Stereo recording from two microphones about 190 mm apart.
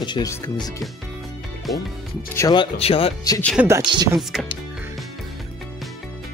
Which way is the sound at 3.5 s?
15° right (ahead or behind).